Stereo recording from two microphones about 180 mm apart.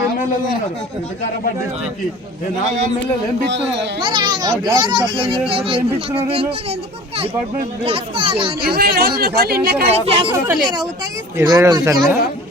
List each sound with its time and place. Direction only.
4.0 s a child's voice: 25° right (ahead or behind)
7.9 s a child's voice: 30° right (ahead or behind)
8.6 s speech: 55° right (ahead or behind)
9.9 s a child's voice: 30° right (ahead or behind)